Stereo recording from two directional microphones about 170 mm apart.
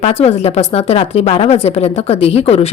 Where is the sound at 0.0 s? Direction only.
40° left (ahead or behind).